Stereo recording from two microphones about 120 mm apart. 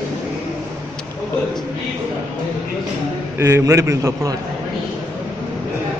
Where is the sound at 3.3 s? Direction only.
25° right (ahead or behind).